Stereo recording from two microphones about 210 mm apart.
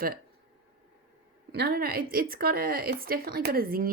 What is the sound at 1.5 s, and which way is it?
Speech, 50° right (ahead or behind).